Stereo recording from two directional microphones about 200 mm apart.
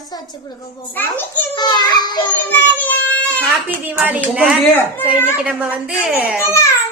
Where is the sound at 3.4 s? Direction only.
10° right (ahead or behind).